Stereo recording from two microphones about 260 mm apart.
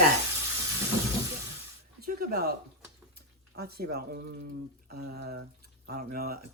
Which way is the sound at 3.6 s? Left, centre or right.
Right.